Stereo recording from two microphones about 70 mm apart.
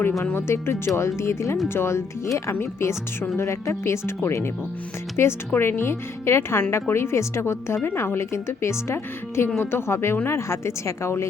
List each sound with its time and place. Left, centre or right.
0.3 s speech: left
5.2 s speech: left